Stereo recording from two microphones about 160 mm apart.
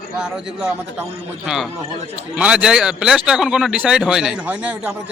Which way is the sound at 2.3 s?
5° right (ahead or behind).